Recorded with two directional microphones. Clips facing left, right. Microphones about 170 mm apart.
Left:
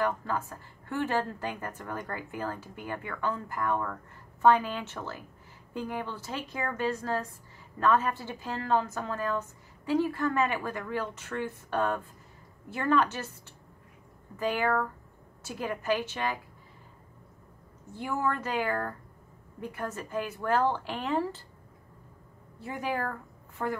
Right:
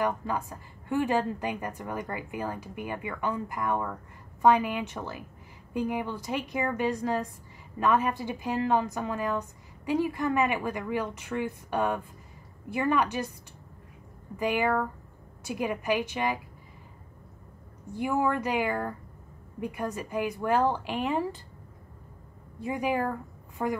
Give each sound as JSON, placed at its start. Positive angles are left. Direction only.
{"t": 0.0, "sound": "a woman's voice", "side_deg": -15}
{"t": 14.4, "sound": "a woman's voice", "side_deg": -15}
{"t": 17.9, "sound": "a woman's voice", "side_deg": -15}
{"t": 22.6, "sound": "a woman's voice", "side_deg": -15}